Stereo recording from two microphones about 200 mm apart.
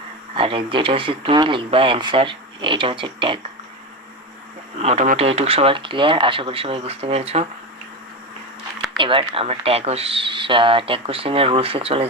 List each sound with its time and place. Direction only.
0.3 s speech: 25° right (ahead or behind)
4.8 s speech: 35° right (ahead or behind)
9.0 s speech: 25° right (ahead or behind)